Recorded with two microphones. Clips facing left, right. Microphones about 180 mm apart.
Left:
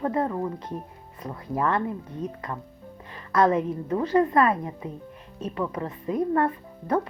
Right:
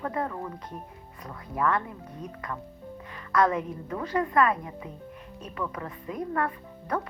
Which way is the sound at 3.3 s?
25° left (ahead or behind).